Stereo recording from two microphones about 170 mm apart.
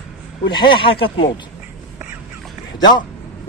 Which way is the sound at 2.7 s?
25° left (ahead or behind).